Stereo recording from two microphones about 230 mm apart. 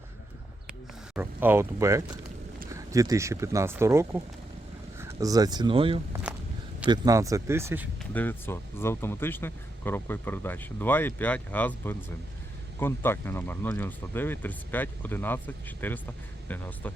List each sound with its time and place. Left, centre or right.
1.1 s speech: centre
8.1 s speech: centre